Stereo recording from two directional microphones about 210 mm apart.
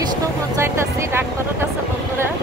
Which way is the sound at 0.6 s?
10° right (ahead or behind).